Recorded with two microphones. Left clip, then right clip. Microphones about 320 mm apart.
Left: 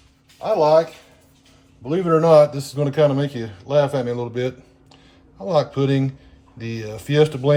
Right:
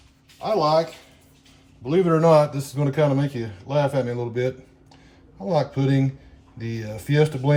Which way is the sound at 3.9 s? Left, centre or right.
Left.